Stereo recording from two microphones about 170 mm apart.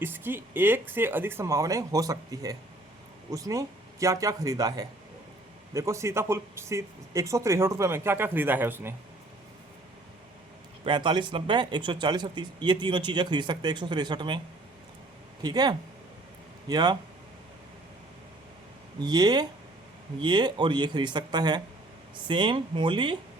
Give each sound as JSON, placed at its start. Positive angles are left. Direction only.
{"t": 0.0, "sound": "speech", "side_deg": -10}
{"t": 10.8, "sound": "speech", "side_deg": -25}
{"t": 18.9, "sound": "speech", "side_deg": -25}